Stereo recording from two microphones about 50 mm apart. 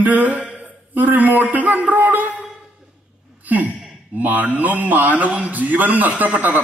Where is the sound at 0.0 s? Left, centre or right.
Right.